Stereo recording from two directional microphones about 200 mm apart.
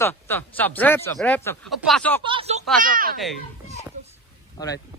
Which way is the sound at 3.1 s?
Centre (ahead or behind).